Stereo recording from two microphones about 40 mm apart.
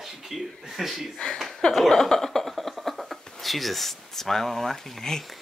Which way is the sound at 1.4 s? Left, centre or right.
Centre.